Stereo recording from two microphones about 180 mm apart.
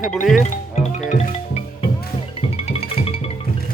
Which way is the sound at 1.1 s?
35° left (ahead or behind).